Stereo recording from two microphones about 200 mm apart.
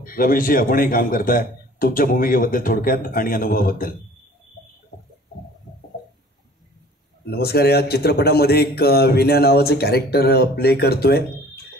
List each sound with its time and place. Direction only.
0.0 s speech: 45° left (ahead or behind)
7.2 s speech: 50° left (ahead or behind)